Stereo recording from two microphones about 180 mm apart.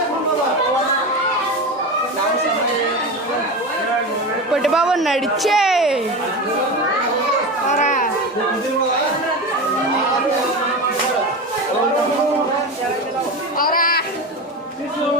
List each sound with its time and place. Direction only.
4.5 s speech: 5° right (ahead or behind)
7.7 s chatter: 40° left (ahead or behind)
13.6 s a sound: 55° left (ahead or behind)